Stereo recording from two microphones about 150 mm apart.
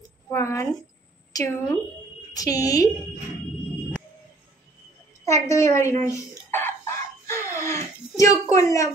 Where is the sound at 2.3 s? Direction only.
25° left (ahead or behind).